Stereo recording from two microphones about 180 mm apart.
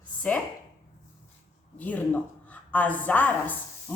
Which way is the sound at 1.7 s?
10° left (ahead or behind).